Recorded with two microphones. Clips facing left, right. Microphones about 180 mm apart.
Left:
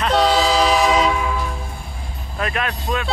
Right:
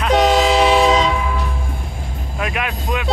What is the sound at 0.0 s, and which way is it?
Train, 15° right (ahead or behind).